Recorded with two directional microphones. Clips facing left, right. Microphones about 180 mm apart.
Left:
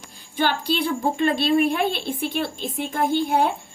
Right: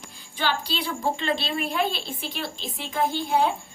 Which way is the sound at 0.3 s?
50° left (ahead or behind).